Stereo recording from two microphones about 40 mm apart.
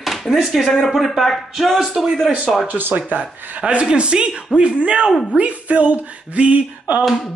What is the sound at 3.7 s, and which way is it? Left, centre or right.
Speech, right.